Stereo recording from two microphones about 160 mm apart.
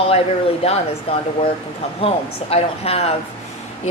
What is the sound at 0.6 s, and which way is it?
Speech, 40° left (ahead or behind).